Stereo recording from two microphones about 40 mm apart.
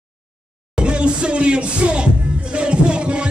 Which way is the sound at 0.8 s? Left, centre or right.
Right.